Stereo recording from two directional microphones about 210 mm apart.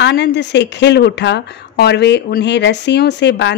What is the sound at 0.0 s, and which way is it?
A woman's voice, 55° left (ahead or behind).